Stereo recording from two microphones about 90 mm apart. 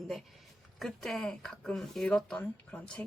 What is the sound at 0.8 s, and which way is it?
Speech, centre (ahead or behind).